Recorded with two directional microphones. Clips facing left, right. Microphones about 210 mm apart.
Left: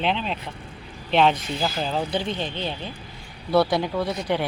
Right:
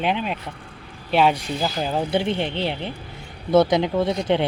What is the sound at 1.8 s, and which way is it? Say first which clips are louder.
Speech: right 2 dB; 10° right (ahead or behind).